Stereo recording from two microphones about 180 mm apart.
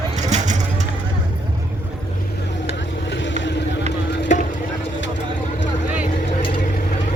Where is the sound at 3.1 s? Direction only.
85° left.